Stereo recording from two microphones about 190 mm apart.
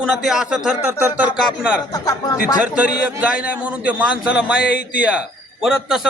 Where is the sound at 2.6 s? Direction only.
5° right (ahead or behind).